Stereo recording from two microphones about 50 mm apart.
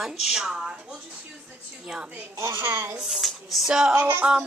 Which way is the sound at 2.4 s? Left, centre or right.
Right.